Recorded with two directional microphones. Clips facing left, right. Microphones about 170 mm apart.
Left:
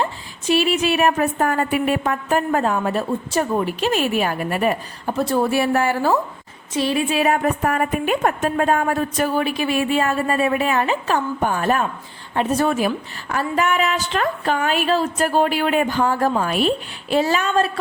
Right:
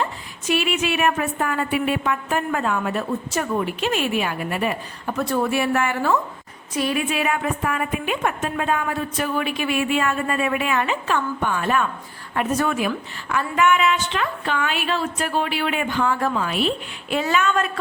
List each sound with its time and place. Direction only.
0.0 s a woman's voice: 35° left (ahead or behind)
5.1 s a woman's voice: 30° left (ahead or behind)
12.3 s a woman's voice: 30° left (ahead or behind)